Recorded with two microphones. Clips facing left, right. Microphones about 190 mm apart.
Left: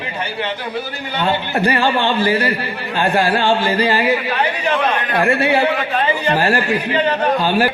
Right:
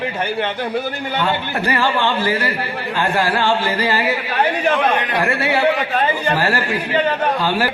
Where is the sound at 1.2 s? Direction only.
30° left (ahead or behind).